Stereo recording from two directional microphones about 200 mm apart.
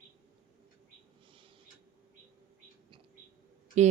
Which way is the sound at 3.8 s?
35° right (ahead or behind).